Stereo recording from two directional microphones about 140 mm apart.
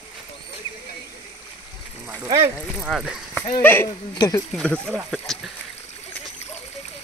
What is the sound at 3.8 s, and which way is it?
Speech, 30° left (ahead or behind).